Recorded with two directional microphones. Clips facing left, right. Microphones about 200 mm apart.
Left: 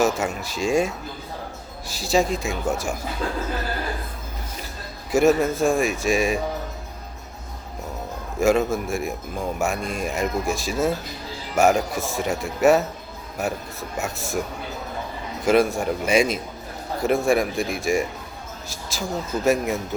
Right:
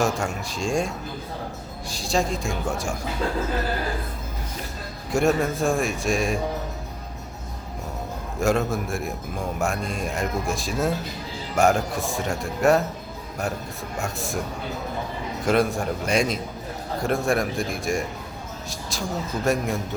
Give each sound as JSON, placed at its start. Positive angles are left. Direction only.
{"t": 0.0, "sound": "a man's voice", "side_deg": 5}
{"t": 5.1, "sound": "a man's voice", "side_deg": 0}
{"t": 8.4, "sound": "a man's voice", "side_deg": 0}
{"t": 15.4, "sound": "a man's voice", "side_deg": 0}